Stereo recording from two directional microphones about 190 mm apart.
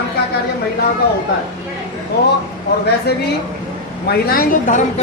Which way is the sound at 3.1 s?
60° left (ahead or behind).